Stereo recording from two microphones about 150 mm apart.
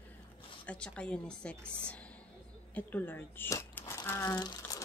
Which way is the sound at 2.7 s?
10° left (ahead or behind).